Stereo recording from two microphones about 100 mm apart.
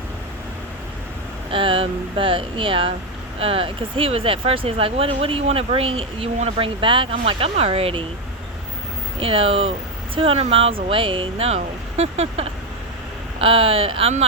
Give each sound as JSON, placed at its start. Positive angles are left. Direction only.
{"t": 1.5, "sound": "speech", "side_deg": -65}
{"t": 9.2, "sound": "speech", "side_deg": -70}
{"t": 13.4, "sound": "speech", "side_deg": -70}